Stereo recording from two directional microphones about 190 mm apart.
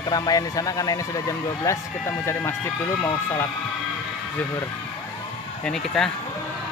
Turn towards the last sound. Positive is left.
turn(degrees=0)  # may be behind; listen again after turning